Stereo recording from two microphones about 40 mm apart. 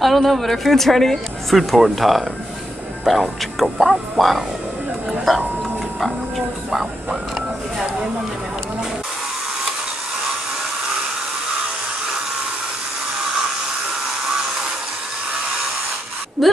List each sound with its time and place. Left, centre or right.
0.0 s speech: centre
5.9 s music: centre
14.2 s a sound: centre